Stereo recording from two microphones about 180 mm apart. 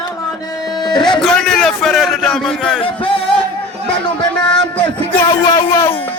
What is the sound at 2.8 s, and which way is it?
Music, 30° left (ahead or behind).